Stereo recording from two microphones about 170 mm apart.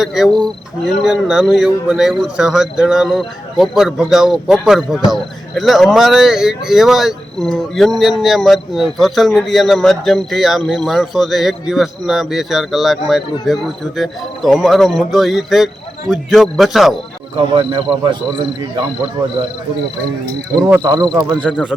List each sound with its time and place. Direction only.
0.0 s speech: centre (ahead or behind)
17.5 s speech: 30° right (ahead or behind)
20.8 s speech: 25° right (ahead or behind)
21.5 s speech: 5° left (ahead or behind)